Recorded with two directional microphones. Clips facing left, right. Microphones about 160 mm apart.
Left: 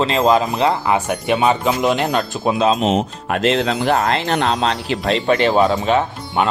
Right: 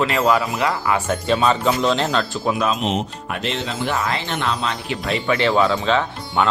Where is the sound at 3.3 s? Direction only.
90° left.